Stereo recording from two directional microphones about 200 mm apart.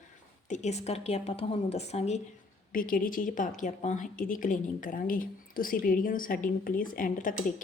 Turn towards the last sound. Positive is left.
turn(degrees=45)  # may be behind; listen again after turning